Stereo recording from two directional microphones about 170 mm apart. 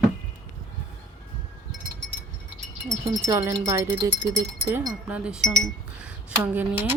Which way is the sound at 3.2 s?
15° right (ahead or behind).